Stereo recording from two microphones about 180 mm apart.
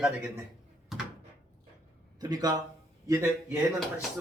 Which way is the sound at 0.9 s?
Centre (ahead or behind).